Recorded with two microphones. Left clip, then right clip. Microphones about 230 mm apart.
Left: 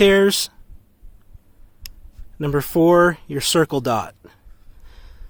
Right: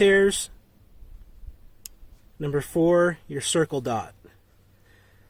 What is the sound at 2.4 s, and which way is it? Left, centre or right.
Speech, left.